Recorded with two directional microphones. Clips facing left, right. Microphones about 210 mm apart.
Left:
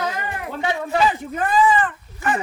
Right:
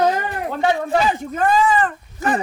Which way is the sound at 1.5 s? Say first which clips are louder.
Even; 40° right (ahead or behind).